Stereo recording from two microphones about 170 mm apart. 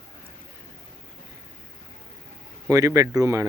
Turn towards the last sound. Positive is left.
turn(degrees=-20)  # may be behind; listen again after turning